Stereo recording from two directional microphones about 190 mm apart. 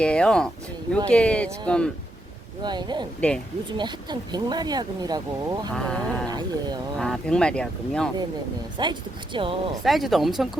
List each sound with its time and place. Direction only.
0.0 s speech: 5° left (ahead or behind)
2.6 s speech: 20° right (ahead or behind)
3.2 s speech: 5° left (ahead or behind)
3.8 s speech: 25° right (ahead or behind)
5.7 s speech: 5° left (ahead or behind)
6.2 s speech: 20° right (ahead or behind)
7.0 s speech: 5° left (ahead or behind)
8.8 s speech: 25° right (ahead or behind)
9.8 s speech: centre (ahead or behind)